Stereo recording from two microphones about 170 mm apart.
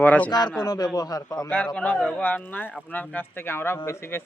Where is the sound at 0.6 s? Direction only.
25° left (ahead or behind).